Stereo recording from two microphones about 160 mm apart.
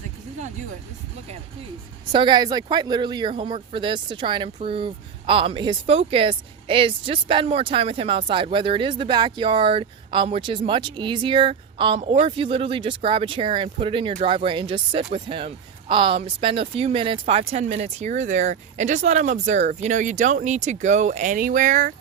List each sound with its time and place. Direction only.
2.1 s speech: 30° right (ahead or behind); by 21.9 s 55° right (ahead or behind)